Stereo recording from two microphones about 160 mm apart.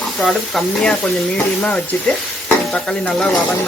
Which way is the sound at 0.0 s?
Centre (ahead or behind).